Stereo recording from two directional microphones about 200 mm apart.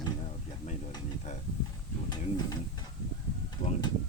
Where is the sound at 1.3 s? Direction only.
35° left (ahead or behind).